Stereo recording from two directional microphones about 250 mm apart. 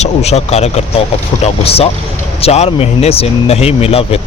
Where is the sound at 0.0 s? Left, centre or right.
Left.